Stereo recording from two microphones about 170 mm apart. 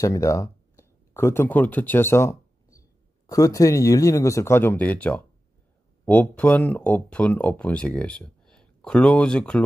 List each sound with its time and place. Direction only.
0.0 s speech: 20° left (ahead or behind)